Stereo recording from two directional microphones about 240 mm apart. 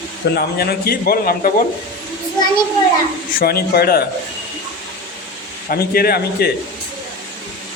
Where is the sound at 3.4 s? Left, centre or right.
Left.